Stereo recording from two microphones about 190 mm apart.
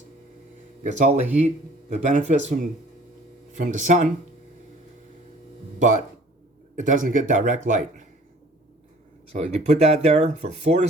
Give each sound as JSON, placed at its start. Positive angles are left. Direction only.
{"t": 0.9, "sound": "speech", "side_deg": -35}
{"t": 3.5, "sound": "speech", "side_deg": -40}
{"t": 6.7, "sound": "speech", "side_deg": -45}
{"t": 9.3, "sound": "speech", "side_deg": -35}